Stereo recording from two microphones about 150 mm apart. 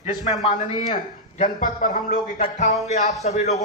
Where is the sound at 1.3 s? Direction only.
60° left (ahead or behind).